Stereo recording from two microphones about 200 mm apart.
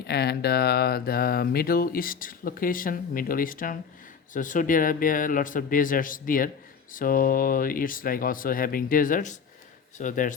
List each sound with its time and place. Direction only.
0.1 s speech: 55° left (ahead or behind)